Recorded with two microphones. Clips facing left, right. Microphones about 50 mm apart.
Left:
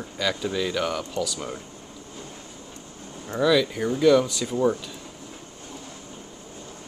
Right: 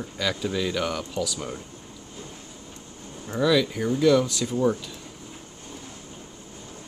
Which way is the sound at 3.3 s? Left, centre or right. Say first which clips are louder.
Left 1 dB; centre.